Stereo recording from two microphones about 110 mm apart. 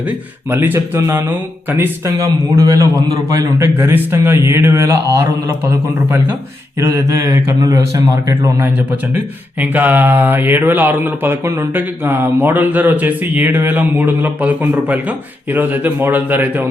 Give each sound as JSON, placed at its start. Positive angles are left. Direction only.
{"t": 0.5, "sound": "a man's voice", "side_deg": -20}
{"t": 3.6, "sound": "a man's voice", "side_deg": -20}
{"t": 6.7, "sound": "a man's voice", "side_deg": -30}
{"t": 9.1, "sound": "speech", "side_deg": -15}